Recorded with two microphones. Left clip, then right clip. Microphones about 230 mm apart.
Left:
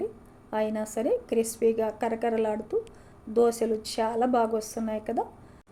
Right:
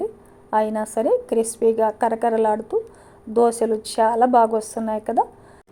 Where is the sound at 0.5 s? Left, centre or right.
Centre.